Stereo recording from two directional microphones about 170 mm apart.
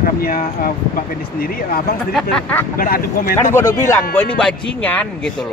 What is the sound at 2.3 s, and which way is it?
Speech, 10° left (ahead or behind).